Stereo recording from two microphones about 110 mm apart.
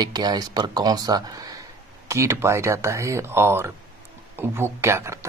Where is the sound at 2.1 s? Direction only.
25° right (ahead or behind).